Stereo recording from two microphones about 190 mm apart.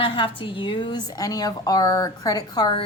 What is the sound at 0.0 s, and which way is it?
A woman's voice, 25° left (ahead or behind).